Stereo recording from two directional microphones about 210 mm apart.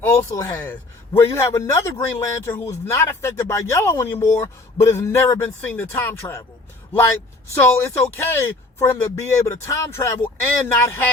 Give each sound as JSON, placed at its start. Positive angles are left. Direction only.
{"t": 0.0, "sound": "a man's voice", "side_deg": 10}
{"t": 7.5, "sound": "a man's voice", "side_deg": 10}